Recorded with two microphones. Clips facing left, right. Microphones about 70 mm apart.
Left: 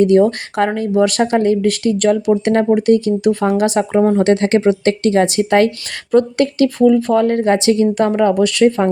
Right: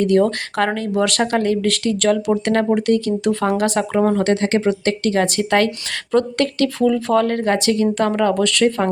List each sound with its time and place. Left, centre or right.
0.0 s speech: centre
4.2 s speech: left